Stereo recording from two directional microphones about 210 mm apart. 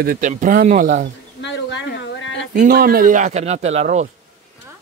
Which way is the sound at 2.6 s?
45° right (ahead or behind).